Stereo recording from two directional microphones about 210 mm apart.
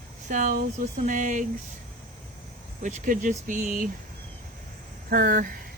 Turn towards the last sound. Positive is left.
turn(degrees=-40)  # may be behind; listen again after turning